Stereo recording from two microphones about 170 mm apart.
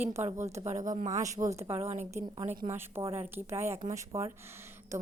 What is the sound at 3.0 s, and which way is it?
Speech, 15° right (ahead or behind).